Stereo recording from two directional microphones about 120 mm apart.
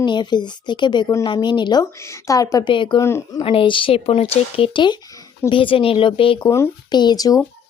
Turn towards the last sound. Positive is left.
turn(degrees=30)  # may be behind; listen again after turning